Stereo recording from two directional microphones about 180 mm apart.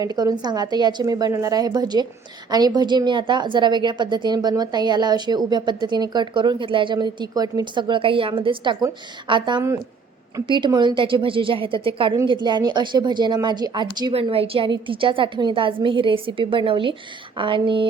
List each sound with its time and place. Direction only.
0.0 s a woman's voice: 20° right (ahead or behind)